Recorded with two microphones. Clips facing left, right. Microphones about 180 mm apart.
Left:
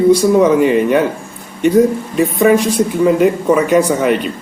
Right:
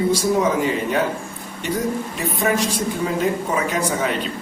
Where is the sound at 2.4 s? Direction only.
55° left (ahead or behind).